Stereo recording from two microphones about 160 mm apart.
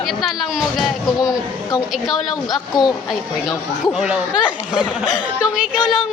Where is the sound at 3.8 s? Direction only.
5° right (ahead or behind).